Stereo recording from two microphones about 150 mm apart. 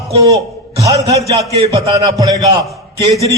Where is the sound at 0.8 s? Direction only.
20° right (ahead or behind).